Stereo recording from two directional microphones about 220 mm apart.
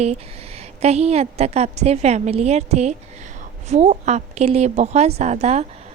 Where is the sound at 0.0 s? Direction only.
30° right (ahead or behind).